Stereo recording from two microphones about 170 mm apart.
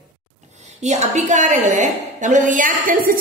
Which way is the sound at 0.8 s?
45° right (ahead or behind).